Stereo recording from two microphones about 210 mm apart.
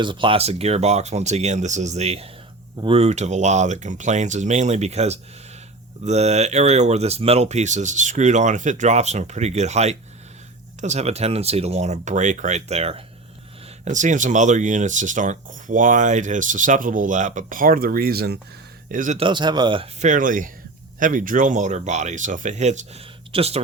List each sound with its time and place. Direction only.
0.0 s speech: 25° right (ahead or behind)